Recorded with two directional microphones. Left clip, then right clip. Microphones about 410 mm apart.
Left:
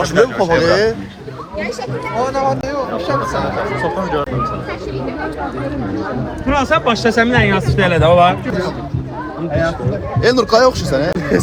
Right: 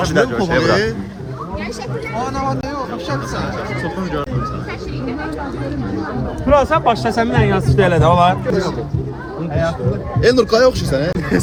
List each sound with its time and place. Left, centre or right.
0.2 s speech: centre
0.6 s a man's voice: centre
2.1 s speech: centre
6.4 s speech: right
10.2 s speech: centre